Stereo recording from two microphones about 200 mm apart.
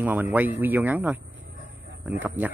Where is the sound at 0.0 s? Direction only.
10° right (ahead or behind).